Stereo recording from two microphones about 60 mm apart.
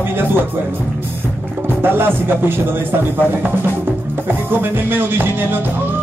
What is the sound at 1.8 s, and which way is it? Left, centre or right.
Music, right.